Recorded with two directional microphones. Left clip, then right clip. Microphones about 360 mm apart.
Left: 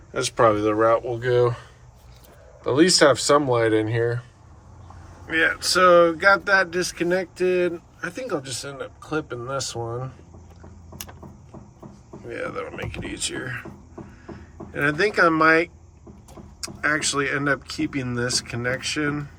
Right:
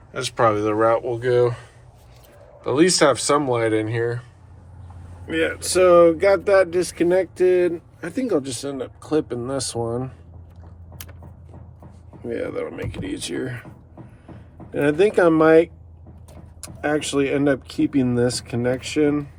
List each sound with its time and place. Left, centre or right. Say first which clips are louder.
0.1 s speech: even; centre
5.3 s speech: left 1 dB; centre
12.3 s speech: right 3 dB; centre
14.7 s speech: right 3 dB; centre
16.8 s speech: right 1 dB; centre